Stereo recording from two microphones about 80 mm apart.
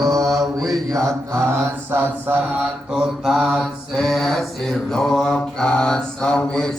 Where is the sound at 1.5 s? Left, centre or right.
Right.